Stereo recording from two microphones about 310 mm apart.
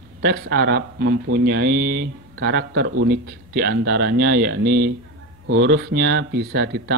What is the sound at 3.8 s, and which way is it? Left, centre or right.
Speech, right.